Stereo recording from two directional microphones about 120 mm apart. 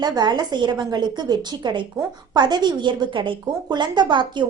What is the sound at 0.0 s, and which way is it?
Speech, 35° right (ahead or behind).